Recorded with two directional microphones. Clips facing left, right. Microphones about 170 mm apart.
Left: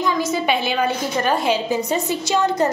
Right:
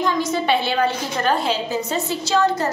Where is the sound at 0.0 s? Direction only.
5° left (ahead or behind).